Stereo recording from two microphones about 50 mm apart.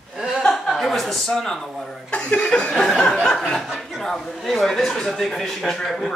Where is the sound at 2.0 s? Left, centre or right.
Left.